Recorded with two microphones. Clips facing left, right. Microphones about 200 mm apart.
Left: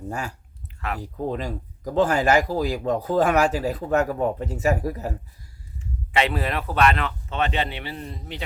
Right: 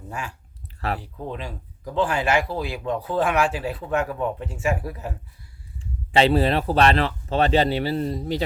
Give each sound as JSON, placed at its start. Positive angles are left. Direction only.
{"t": 0.1, "sound": "speech", "side_deg": 40}
{"t": 5.8, "sound": "speech", "side_deg": -30}